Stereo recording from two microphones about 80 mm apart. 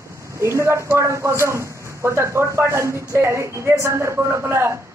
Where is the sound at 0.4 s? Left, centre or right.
Right.